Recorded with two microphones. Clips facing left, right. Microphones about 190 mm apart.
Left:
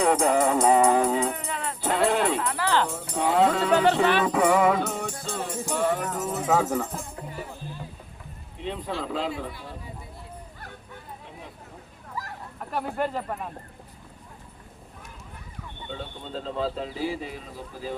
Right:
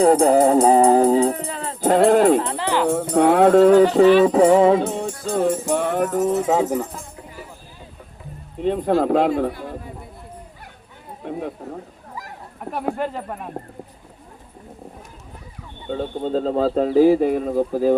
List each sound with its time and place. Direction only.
0.0 s music: 35° right (ahead or behind)
1.8 s music: 50° right (ahead or behind)
2.4 s music: 25° right (ahead or behind)
2.8 s speech: 65° right (ahead or behind); by 4.0 s 50° right (ahead or behind)
4.2 s music: 35° right (ahead or behind)
5.2 s music: 40° right (ahead or behind)
5.6 s speech: 55° right (ahead or behind)
6.5 s music: 15° right (ahead or behind)
8.5 s speech: 45° right (ahead or behind)
11.3 s speech: 55° right (ahead or behind)
13.0 s speech: centre (ahead or behind)
15.9 s speech: 45° right (ahead or behind)